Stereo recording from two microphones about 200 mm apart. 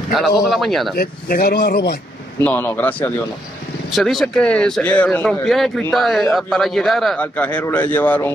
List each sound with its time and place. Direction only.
0.1 s speech: centre (ahead or behind)
0.9 s speech: 50° left (ahead or behind)
2.4 s a man's voice: 10° left (ahead or behind)